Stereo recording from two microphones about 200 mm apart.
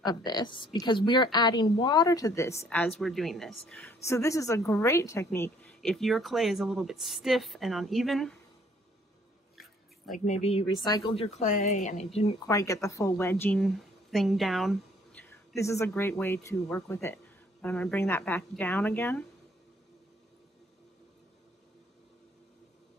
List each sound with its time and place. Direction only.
0.0 s a woman's voice: 20° left (ahead or behind); by 8.4 s centre (ahead or behind)
10.1 s speech: 35° left (ahead or behind)
12.4 s a woman's voice: 15° left (ahead or behind)
15.2 s a sound: 15° left (ahead or behind)
15.9 s speech: 10° left (ahead or behind)